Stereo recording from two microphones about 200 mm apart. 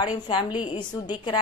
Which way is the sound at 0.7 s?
25° left (ahead or behind).